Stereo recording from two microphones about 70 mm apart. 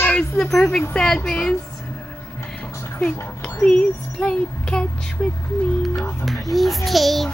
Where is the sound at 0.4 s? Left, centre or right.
Centre.